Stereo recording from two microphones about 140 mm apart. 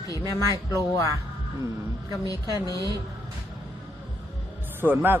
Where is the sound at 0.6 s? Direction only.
25° left (ahead or behind).